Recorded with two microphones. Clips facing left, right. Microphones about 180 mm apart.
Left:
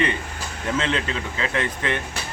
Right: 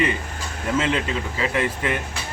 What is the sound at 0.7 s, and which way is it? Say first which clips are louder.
Speech: right 3 dB; 10° right (ahead or behind).